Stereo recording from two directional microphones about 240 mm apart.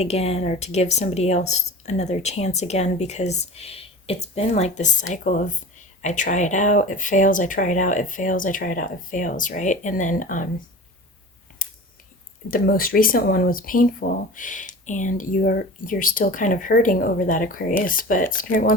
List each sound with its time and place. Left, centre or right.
0.0 s speech: left
12.5 s speech: left